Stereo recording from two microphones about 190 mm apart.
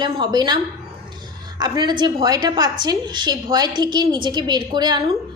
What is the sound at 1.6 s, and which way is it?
A woman's voice, 25° right (ahead or behind).